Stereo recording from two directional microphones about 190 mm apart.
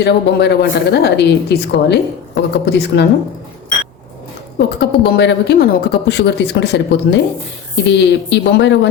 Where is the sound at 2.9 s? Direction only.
65° left (ahead or behind).